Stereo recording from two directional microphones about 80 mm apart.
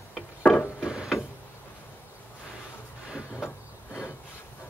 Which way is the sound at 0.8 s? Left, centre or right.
Centre.